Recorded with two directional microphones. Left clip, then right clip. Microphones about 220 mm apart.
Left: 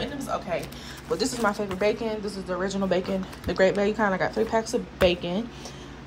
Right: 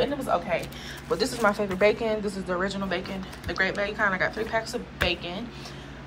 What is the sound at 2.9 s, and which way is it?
Speech, 30° left (ahead or behind).